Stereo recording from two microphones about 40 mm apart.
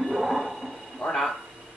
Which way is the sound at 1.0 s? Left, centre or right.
Left.